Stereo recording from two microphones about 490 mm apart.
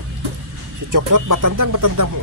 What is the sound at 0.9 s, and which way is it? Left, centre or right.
Music, right.